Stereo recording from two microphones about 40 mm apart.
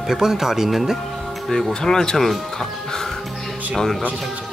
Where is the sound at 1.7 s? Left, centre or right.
Centre.